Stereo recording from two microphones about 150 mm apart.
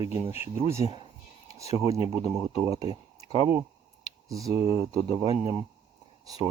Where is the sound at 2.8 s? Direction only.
30° right (ahead or behind).